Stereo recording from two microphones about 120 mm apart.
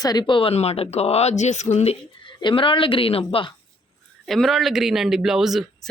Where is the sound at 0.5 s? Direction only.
60° left (ahead or behind).